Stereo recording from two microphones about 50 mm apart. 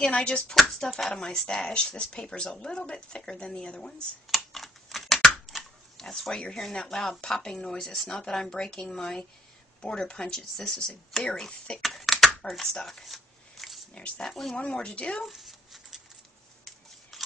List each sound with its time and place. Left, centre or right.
0.1 s speech: left
0.8 s speech: centre
4.5 s typing: centre
5.5 s pig: centre
6.7 s speech: centre
11.8 s computer keyboard: centre
12.4 s speech: centre
12.8 s a sound: centre
13.9 s speech: left
14.2 s speech: centre
14.6 s speech: left
15.2 s a sound: centre